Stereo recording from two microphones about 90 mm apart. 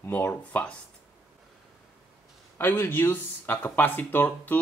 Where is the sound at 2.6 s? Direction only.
20° left (ahead or behind).